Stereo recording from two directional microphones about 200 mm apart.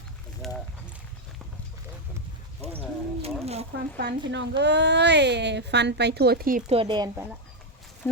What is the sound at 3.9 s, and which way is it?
A woman's voice, 60° right (ahead or behind).